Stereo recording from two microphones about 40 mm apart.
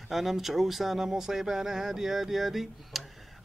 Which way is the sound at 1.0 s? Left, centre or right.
Centre.